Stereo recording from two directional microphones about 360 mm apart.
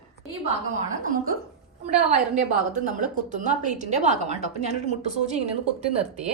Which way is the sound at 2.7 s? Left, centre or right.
Right.